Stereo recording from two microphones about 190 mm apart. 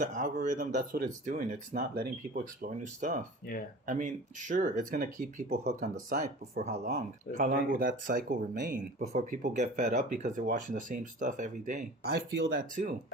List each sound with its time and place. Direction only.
0.0 s speech: 40° right (ahead or behind)
3.5 s speech: 50° left (ahead or behind)
3.8 s speech: 45° right (ahead or behind)
12.0 s speech: 55° right (ahead or behind)